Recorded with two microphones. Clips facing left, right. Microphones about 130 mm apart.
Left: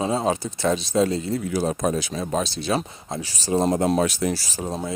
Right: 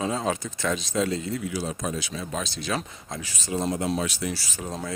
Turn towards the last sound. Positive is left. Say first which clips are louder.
# left 6 dB
turn(degrees=40)  # may be behind; listen again after turning